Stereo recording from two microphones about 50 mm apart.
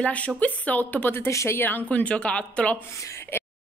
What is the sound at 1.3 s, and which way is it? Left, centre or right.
Speech, left.